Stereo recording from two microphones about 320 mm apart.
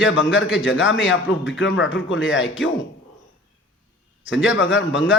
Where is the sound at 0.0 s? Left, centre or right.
Left.